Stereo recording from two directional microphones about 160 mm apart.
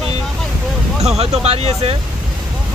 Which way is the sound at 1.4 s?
40° right (ahead or behind).